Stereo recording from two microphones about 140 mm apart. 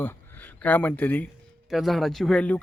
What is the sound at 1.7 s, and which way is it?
Speech, centre (ahead or behind).